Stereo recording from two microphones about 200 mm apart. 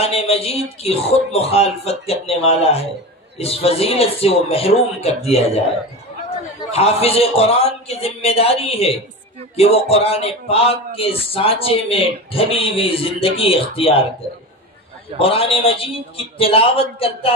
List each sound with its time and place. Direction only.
0.0 s speech: 30° left (ahead or behind)
6.7 s speech: 30° left (ahead or behind)
15.1 s speech: 25° left (ahead or behind)